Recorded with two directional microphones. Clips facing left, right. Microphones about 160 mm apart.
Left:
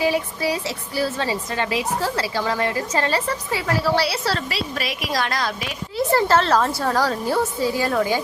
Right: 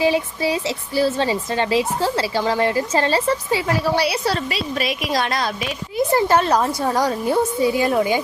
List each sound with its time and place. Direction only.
0.0 s a woman's voice: 25° right (ahead or behind)